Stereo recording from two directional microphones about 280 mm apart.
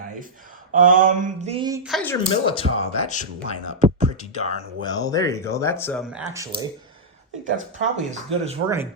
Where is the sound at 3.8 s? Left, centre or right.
Right.